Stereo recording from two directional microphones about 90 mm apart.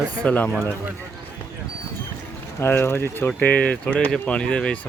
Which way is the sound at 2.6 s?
30° left (ahead or behind).